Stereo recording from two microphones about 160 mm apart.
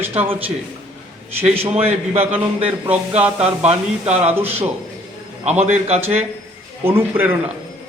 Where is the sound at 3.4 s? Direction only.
40° right (ahead or behind).